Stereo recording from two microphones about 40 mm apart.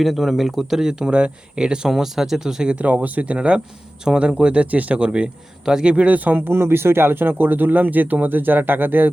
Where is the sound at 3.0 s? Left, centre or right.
Right.